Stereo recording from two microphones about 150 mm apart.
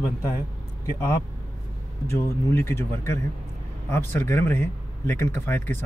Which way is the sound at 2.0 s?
20° left (ahead or behind).